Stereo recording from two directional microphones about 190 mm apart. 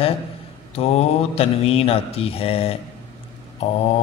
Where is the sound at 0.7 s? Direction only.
30° left (ahead or behind).